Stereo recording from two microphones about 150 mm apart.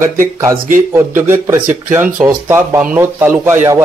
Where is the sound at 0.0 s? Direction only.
20° right (ahead or behind).